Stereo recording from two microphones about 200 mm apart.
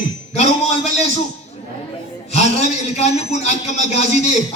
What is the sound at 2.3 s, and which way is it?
A man's voice, 35° left (ahead or behind).